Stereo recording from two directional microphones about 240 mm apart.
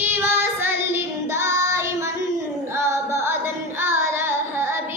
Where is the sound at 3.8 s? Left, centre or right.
Centre.